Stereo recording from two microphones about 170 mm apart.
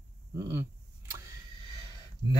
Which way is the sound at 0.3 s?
15° right (ahead or behind).